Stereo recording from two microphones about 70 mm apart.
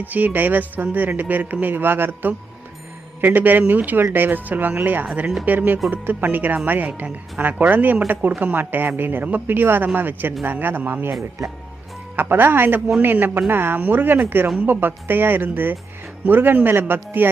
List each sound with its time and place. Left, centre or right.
0.0 s speech: right
11.2 s speech: right
12.1 s speech: right